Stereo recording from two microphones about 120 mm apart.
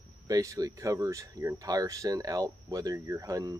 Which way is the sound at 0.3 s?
30° right (ahead or behind).